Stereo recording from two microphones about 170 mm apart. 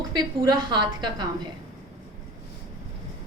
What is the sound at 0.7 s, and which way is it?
Speech, 25° right (ahead or behind).